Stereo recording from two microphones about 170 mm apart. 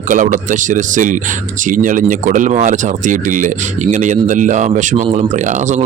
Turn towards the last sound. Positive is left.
turn(degrees=-45)  # may be behind; listen again after turning